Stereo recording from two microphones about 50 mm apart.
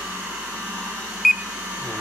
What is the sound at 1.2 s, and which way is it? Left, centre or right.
Beep, centre.